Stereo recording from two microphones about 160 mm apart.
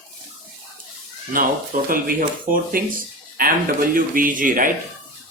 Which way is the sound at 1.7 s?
55° right (ahead or behind).